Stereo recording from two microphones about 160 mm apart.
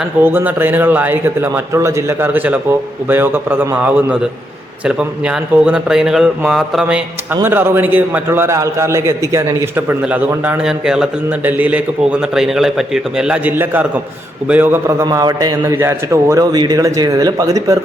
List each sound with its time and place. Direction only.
0.0 s a man's voice: 15° right (ahead or behind)